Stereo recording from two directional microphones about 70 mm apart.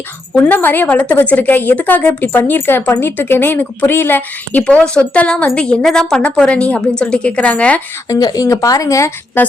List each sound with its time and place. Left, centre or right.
0.3 s a woman's voice: left
4.6 s a woman's voice: centre
8.1 s speech: left
9.4 s a woman's voice: left